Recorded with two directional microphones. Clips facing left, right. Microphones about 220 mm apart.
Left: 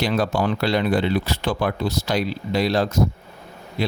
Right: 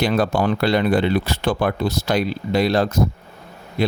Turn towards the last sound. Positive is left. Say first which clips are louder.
# right 4 dB
turn(degrees=-50)  # may be behind; listen again after turning